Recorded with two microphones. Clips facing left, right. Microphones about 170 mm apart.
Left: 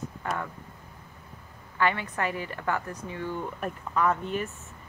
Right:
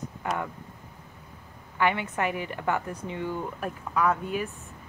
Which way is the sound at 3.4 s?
5° right (ahead or behind).